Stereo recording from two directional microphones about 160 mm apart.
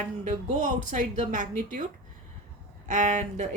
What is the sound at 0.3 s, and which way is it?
Speech, 50° right (ahead or behind).